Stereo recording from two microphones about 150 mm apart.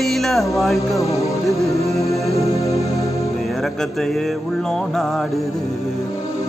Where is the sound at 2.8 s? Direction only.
20° left (ahead or behind).